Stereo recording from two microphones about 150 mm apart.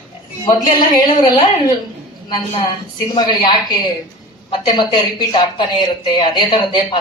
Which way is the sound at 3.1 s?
30° left (ahead or behind).